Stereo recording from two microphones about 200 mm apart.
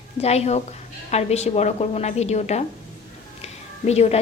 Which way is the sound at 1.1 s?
30° left (ahead or behind).